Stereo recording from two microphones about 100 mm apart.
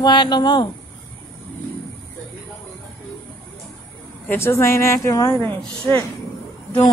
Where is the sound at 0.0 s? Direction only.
45° left (ahead or behind).